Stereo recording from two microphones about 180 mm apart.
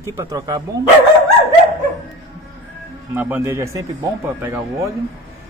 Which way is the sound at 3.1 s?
10° right (ahead or behind).